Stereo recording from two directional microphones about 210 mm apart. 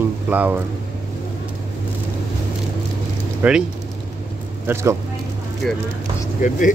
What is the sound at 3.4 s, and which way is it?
Speech, 10° right (ahead or behind).